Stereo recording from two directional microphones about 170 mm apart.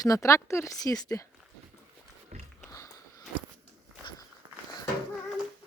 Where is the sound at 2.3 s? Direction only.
40° right (ahead or behind).